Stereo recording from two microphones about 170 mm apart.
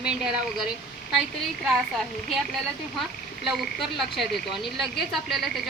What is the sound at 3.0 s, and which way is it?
Speech, centre (ahead or behind).